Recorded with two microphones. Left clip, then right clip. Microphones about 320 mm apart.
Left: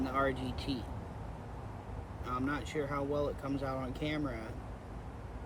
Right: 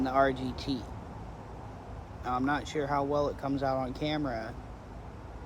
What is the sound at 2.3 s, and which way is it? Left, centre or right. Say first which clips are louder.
Speech: right 5 dB; centre.